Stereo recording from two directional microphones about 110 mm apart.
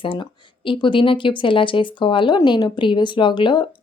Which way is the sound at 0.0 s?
50° left (ahead or behind).